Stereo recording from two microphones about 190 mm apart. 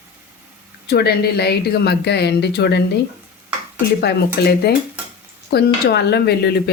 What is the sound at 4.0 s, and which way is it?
Speech, 60° left (ahead or behind).